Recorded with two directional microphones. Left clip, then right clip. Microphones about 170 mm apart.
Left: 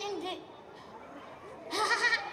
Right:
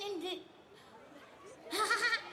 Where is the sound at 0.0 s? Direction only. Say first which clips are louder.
Left 3 dB; 15° left (ahead or behind).